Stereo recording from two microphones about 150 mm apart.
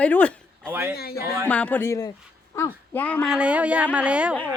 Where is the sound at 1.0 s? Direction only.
90° left.